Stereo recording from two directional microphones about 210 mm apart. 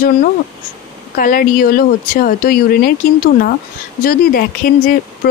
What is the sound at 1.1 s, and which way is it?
Speech, 40° left (ahead or behind).